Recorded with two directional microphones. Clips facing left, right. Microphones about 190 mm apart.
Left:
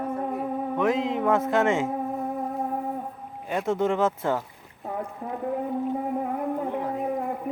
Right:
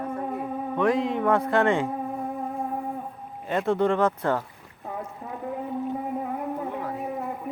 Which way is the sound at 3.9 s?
10° left (ahead or behind).